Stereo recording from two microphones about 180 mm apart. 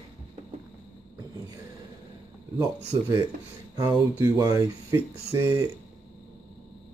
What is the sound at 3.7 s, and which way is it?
Speech, 20° right (ahead or behind).